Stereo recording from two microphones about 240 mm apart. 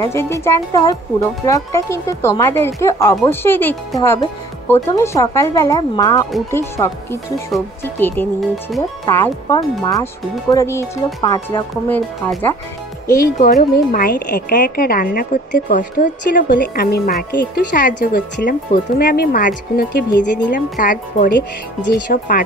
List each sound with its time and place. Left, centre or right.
0.0 s speech: centre
13.1 s speech: left